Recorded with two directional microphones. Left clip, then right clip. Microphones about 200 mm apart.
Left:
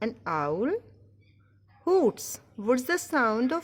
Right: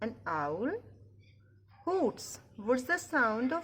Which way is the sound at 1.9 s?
50° left (ahead or behind).